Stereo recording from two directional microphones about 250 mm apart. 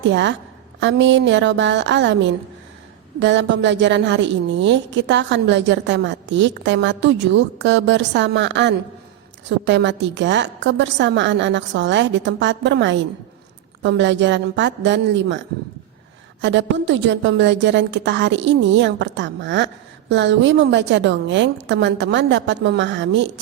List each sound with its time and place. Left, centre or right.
0.1 s a woman's voice: right
3.2 s a woman's voice: right